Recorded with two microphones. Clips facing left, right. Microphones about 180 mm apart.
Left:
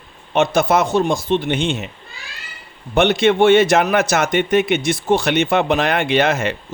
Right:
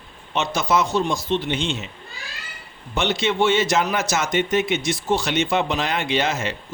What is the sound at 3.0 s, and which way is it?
Speech, 60° left (ahead or behind).